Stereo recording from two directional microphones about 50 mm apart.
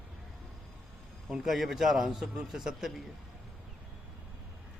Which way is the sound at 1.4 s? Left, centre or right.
Centre.